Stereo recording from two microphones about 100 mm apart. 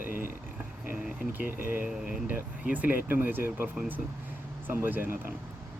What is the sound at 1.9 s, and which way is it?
Speech, 10° right (ahead or behind).